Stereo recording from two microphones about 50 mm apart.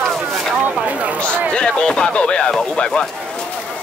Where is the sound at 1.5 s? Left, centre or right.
Left.